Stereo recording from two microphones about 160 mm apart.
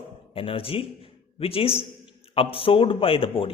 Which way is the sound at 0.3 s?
35° left (ahead or behind).